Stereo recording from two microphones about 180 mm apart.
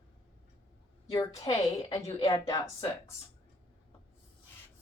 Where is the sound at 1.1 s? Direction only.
20° left (ahead or behind).